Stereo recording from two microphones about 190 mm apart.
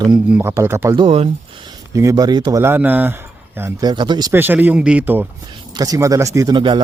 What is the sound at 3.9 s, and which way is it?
Speech, 25° right (ahead or behind).